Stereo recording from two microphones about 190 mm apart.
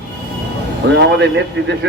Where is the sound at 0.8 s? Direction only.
70° right (ahead or behind).